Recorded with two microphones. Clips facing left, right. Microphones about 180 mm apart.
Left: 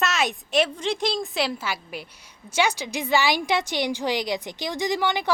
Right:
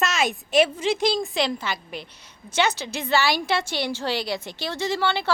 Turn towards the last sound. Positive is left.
turn(degrees=15)  # may be behind; listen again after turning